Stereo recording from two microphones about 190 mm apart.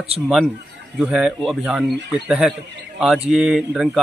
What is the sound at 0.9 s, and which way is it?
Speech, 5° right (ahead or behind).